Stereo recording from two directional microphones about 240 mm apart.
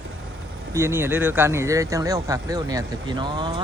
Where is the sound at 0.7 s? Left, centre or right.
Centre.